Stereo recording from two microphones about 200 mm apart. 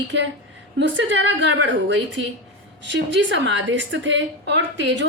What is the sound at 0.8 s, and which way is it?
Speech, 65° right (ahead or behind).